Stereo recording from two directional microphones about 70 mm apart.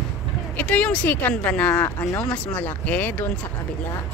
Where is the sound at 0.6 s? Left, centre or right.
Centre.